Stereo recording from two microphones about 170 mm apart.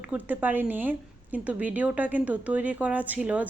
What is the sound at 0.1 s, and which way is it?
A woman's voice, 10° right (ahead or behind).